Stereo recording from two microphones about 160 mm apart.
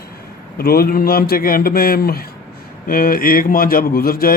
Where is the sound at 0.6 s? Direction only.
70° left (ahead or behind).